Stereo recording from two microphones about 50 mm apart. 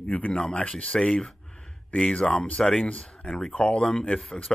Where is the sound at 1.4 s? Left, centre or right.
Centre.